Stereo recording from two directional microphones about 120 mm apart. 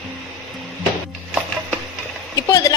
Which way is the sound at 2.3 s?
30° left (ahead or behind).